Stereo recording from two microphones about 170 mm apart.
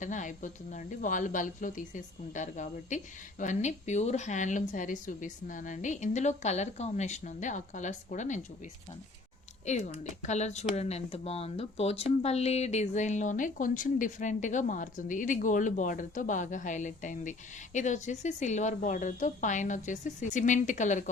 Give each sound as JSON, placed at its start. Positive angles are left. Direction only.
{"t": 0.0, "sound": "speech", "side_deg": 45}
{"t": 9.6, "sound": "speech", "side_deg": 45}